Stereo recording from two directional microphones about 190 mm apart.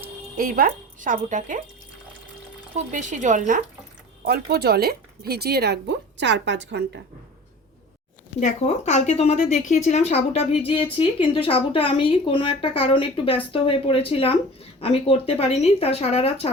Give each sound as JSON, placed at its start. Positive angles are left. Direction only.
{"t": 0.3, "sound": "speech", "side_deg": -50}
{"t": 2.7, "sound": "speech", "side_deg": -40}
{"t": 4.2, "sound": "speech", "side_deg": -55}
{"t": 8.4, "sound": "a woman's voice", "side_deg": 40}